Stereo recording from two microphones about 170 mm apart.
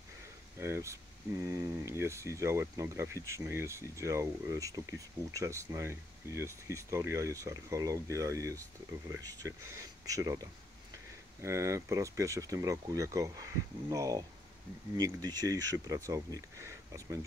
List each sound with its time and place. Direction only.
0.6 s speech: 15° right (ahead or behind)